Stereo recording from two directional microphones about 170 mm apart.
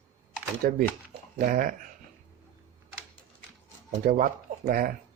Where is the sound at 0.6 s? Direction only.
55° right (ahead or behind).